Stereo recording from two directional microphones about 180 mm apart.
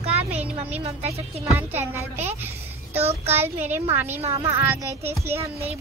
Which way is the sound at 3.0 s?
35° right (ahead or behind).